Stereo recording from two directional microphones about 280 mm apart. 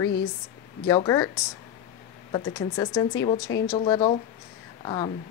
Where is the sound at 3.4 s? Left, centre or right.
Left.